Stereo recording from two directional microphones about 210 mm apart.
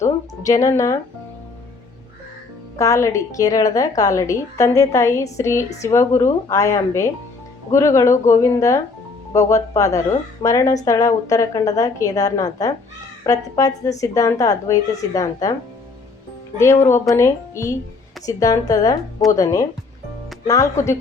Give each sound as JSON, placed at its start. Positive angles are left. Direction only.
{"t": 0.0, "sound": "a woman's voice", "side_deg": 15}
{"t": 2.7, "sound": "a woman's voice", "side_deg": 15}
{"t": 16.8, "sound": "a woman's voice", "side_deg": 15}